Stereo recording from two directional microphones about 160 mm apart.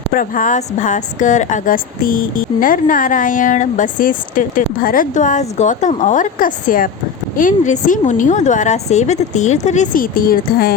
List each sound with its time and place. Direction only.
0.1 s a woman's voice: 60° left (ahead or behind)